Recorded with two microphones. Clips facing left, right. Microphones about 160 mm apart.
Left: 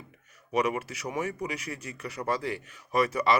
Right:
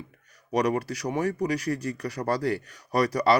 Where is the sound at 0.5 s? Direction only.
35° right (ahead or behind).